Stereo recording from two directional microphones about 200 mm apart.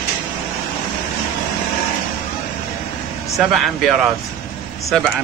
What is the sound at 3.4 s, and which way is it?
Speech, centre (ahead or behind).